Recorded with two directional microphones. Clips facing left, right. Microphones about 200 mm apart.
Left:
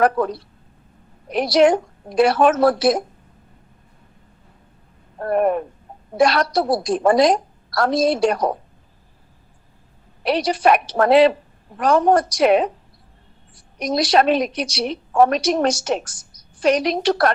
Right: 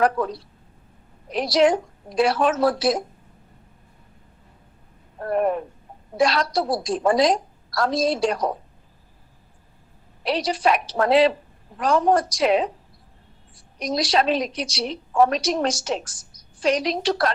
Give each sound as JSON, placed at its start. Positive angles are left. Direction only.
{"t": 0.0, "sound": "a woman's voice", "side_deg": 60}
{"t": 5.2, "sound": "a woman's voice", "side_deg": 55}
{"t": 10.2, "sound": "a woman's voice", "side_deg": 65}
{"t": 13.7, "sound": "a woman's voice", "side_deg": 65}